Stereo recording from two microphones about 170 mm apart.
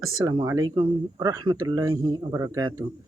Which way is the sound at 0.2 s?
20° right (ahead or behind).